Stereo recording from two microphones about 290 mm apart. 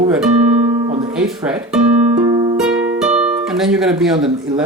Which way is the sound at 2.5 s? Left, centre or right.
Centre.